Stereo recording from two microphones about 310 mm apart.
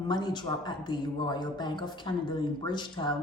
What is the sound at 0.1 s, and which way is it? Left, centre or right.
Speech, centre.